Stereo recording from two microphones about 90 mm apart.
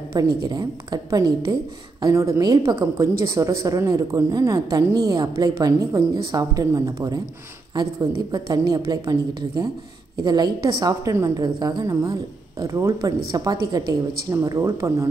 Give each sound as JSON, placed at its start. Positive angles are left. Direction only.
{"t": 0.2, "sound": "a woman's voice", "side_deg": -45}
{"t": 11.1, "sound": "a woman's voice", "side_deg": -35}
{"t": 11.4, "sound": "a woman's voice", "side_deg": -50}